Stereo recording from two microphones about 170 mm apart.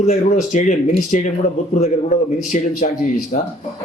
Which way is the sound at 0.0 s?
45° left (ahead or behind).